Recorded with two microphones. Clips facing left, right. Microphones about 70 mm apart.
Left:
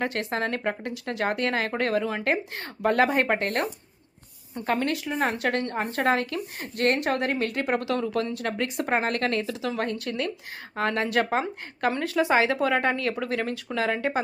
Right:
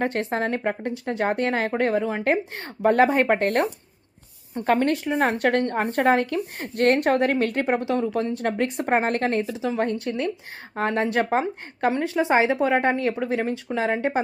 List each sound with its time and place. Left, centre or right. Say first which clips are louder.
0.0 s a woman's voice: right 3 dB; right
7.8 s speech: right 3 dB; right